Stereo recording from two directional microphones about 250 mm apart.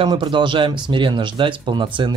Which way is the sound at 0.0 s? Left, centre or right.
Centre.